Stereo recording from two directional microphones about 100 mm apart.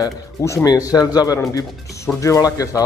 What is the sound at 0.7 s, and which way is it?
Speech, 35° left (ahead or behind).